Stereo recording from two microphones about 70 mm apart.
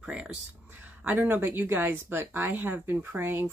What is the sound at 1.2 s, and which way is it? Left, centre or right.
Speech, right.